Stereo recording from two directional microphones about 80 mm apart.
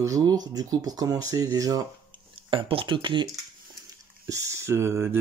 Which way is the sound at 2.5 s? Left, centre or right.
Right.